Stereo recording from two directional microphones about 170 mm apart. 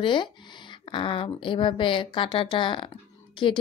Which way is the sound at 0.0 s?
30° left (ahead or behind).